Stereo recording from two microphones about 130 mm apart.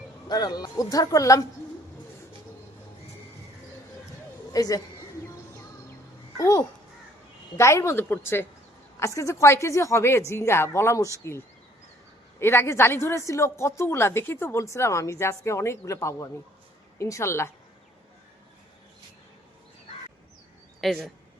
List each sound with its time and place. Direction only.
0.3 s a woman's voice: 30° left (ahead or behind)
4.5 s a woman's voice: 30° left (ahead or behind)
6.3 s a child's voice: 25° left (ahead or behind)
20.8 s speech: centre (ahead or behind)